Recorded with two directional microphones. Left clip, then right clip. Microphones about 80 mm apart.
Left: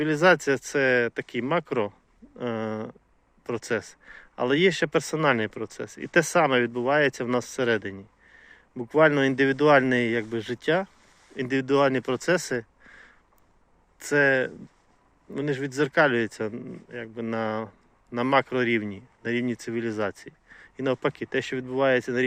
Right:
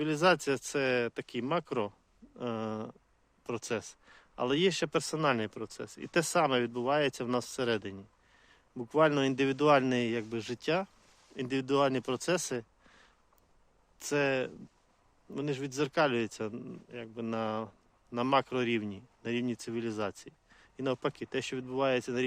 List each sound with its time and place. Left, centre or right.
0.0 s speech: right
16.5 s speech: right